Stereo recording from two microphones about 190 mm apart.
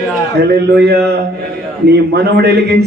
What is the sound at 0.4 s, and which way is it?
Speech, 60° right (ahead or behind).